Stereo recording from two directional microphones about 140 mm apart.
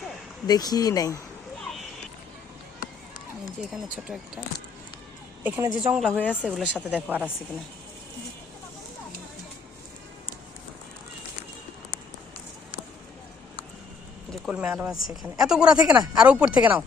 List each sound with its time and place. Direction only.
0.4 s speech: 30° left (ahead or behind)
5.4 s speech: 10° right (ahead or behind)
6.1 s speech: 10° left (ahead or behind)
6.4 s speech: 5° right (ahead or behind)
14.3 s speech: 5° right (ahead or behind)